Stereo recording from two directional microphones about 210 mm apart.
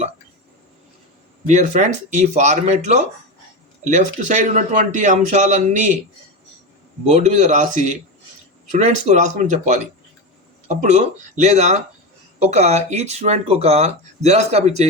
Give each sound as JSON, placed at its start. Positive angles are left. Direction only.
{"t": 1.5, "sound": "speech", "side_deg": -35}
{"t": 7.1, "sound": "speech", "side_deg": -35}